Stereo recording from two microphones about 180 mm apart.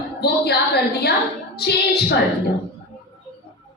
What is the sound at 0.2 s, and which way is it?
A woman's voice, 65° left (ahead or behind).